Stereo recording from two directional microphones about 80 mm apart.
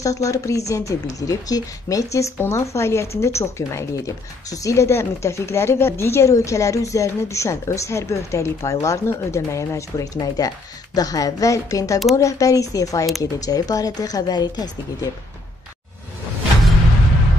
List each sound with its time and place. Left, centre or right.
0.0 s a woman's voice: left